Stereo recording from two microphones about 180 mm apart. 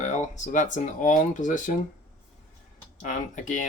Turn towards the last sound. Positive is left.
turn(degrees=45)  # may be behind; listen again after turning